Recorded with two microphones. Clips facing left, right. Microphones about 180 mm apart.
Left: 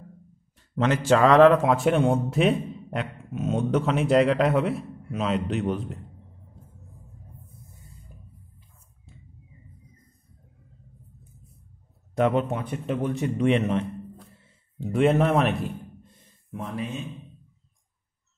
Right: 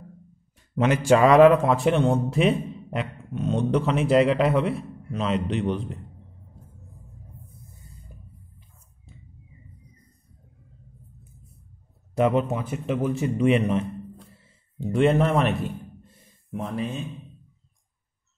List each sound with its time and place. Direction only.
0.7 s a man's voice: 15° right (ahead or behind)
1.6 s speech: centre (ahead or behind)
12.2 s speech: 5° right (ahead or behind)
14.3 s a sound: centre (ahead or behind)